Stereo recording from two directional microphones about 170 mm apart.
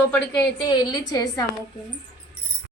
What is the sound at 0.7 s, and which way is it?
Speech, 25° left (ahead or behind).